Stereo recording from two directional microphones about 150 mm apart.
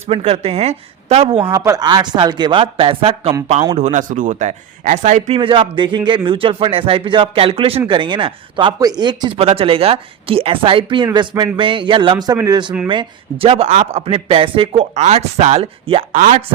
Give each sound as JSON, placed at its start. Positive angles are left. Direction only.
{"t": 0.1, "sound": "a woman's voice", "side_deg": -40}
{"t": 1.5, "sound": "speech", "side_deg": -20}
{"t": 3.8, "sound": "a man's voice", "side_deg": -50}
{"t": 5.4, "sound": "speech", "side_deg": -35}
{"t": 16.1, "sound": "a man's voice", "side_deg": -60}